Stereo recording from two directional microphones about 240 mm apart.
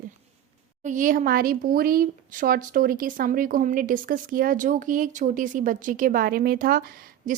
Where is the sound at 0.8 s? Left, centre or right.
Right.